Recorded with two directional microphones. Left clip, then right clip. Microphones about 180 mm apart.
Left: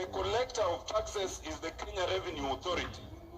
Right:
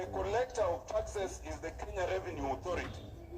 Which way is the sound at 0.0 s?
30° left (ahead or behind).